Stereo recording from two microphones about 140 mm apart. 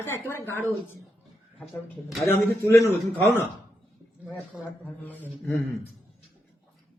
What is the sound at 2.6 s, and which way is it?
Speech, 15° left (ahead or behind).